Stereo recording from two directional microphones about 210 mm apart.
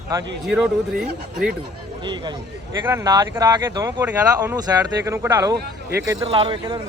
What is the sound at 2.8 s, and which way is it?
A man's voice, 15° right (ahead or behind).